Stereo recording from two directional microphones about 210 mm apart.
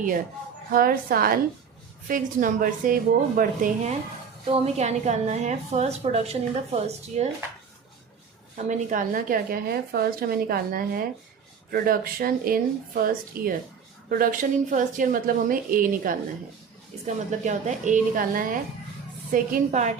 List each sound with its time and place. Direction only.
0.7 s a woman's voice: 45° right (ahead or behind)
4.4 s a woman's voice: 30° right (ahead or behind)
8.5 s a woman's voice: 35° right (ahead or behind)